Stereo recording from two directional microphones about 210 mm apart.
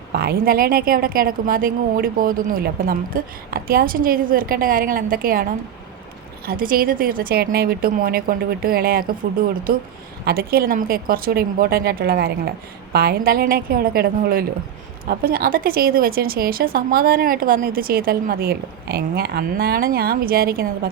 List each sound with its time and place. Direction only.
0.2 s a woman's voice: 45° right (ahead or behind)
10.2 s a woman's voice: 45° right (ahead or behind)